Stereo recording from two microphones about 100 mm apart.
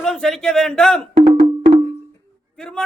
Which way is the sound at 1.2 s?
90° right.